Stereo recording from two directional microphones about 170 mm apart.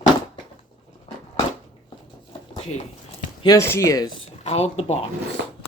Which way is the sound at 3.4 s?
20° left (ahead or behind).